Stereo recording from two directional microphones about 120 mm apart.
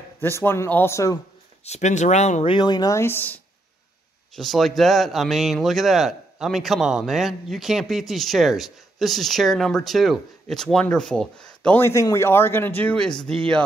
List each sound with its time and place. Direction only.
0.2 s speech: 20° left (ahead or behind)
1.6 s speech: 70° left (ahead or behind)
2.4 s speech: 40° left (ahead or behind)
3.0 s speech: 15° left (ahead or behind)
4.4 s speech: centre (ahead or behind)
11.8 s speech: 25° left (ahead or behind)
12.9 s speech: 5° left (ahead or behind)